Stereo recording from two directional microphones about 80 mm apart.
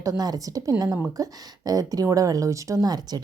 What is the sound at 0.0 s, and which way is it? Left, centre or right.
A woman's voice, right.